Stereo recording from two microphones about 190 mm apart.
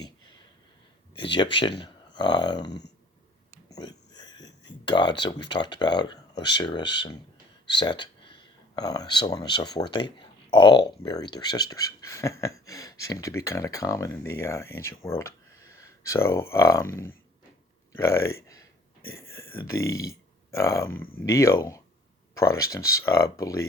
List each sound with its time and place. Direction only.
1.1 s speech: 25° left (ahead or behind)
2.6 s speech: 65° left (ahead or behind)
3.7 s a sound: 20° left (ahead or behind)
4.4 s speech: 25° left (ahead or behind)
17.9 s speech: 15° left (ahead or behind)
19.4 s speech: 15° left (ahead or behind)